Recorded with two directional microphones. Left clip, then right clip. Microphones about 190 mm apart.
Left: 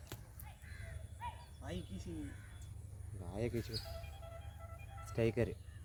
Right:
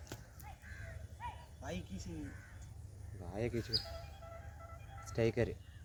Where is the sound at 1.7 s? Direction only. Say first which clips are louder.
Right 2 dB; 30° right (ahead or behind).